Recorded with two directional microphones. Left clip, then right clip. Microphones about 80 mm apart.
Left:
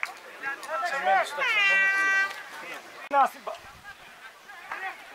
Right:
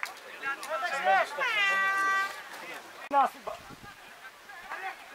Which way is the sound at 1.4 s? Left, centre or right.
Centre.